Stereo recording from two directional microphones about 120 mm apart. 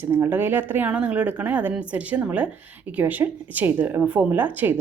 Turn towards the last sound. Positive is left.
turn(degrees=-15)  # may be behind; listen again after turning